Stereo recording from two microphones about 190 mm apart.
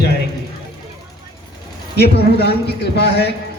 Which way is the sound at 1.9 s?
60° left (ahead or behind).